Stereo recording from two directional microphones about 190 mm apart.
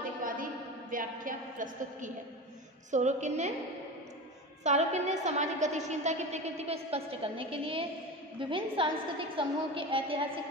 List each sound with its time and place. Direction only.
0.2 s a sound: 45° right (ahead or behind)
2.9 s a woman's voice: 40° right (ahead or behind)
4.6 s a woman's voice: 35° right (ahead or behind)